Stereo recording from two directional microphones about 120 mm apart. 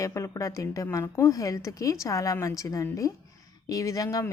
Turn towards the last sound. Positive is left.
turn(degrees=30)  # may be behind; listen again after turning